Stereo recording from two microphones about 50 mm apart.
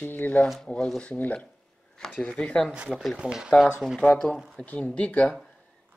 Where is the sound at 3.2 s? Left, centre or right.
Right.